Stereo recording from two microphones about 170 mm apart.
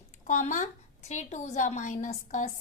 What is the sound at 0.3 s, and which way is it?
A woman's voice, 45° left (ahead or behind).